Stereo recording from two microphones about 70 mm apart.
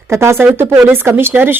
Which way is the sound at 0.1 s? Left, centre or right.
Right.